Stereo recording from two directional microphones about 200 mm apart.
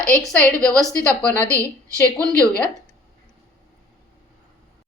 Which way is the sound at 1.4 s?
15° right (ahead or behind).